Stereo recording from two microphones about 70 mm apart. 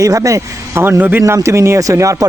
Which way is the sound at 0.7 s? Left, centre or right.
Right.